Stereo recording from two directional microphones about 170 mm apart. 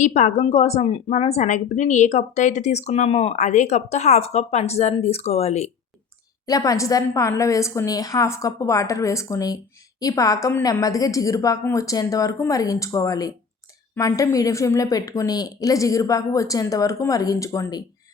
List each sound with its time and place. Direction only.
0.0 s a woman's voice: 45° left (ahead or behind)
6.4 s a woman's voice: 20° left (ahead or behind)